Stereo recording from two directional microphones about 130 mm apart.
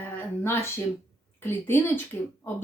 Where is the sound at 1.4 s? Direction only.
15° left (ahead or behind).